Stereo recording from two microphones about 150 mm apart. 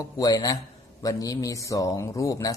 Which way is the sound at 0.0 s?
25° left (ahead or behind).